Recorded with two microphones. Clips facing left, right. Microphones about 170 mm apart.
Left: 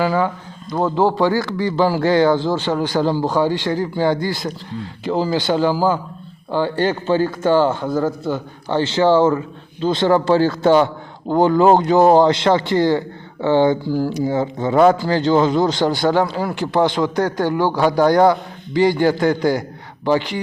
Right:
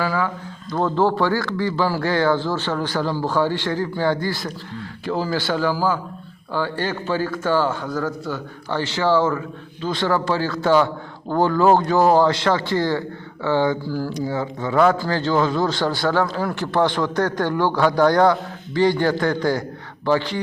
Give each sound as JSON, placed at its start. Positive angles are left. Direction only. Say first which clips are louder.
{"t": 0.0, "sound": "a man's voice", "louder": "left 5 dB", "side_deg": 25}
{"t": 0.7, "sound": "a man's voice", "louder": "left 2 dB", "side_deg": 15}